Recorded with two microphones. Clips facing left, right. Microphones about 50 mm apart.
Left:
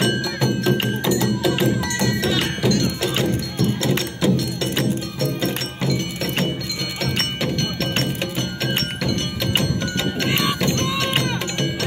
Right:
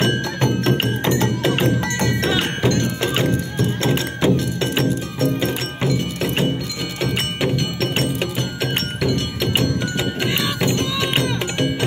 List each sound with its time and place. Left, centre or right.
0.0 s music: right; by 8.0 s centre
8.4 s music: centre
9.5 s music: centre